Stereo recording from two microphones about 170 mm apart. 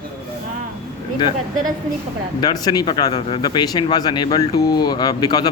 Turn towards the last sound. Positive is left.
turn(degrees=25)  # may be behind; listen again after turning